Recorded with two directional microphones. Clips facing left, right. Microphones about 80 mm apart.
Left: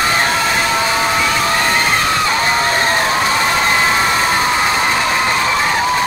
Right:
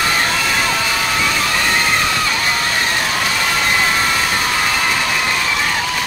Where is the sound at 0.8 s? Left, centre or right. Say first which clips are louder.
Left 3 dB; left.